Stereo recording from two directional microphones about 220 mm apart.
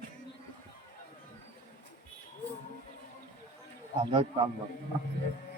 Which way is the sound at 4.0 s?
20° right (ahead or behind).